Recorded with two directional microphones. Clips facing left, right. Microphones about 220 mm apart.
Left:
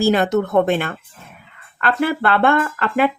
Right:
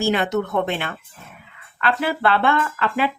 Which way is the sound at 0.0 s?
40° left (ahead or behind).